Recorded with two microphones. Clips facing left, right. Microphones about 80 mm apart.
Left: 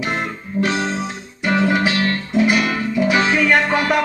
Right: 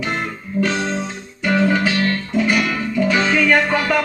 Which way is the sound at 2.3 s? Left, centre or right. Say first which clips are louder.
Left 3 dB; centre.